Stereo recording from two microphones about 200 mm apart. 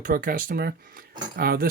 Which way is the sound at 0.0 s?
45° right (ahead or behind).